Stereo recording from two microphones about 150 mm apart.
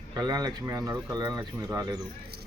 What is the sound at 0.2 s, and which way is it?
Speech, 25° right (ahead or behind).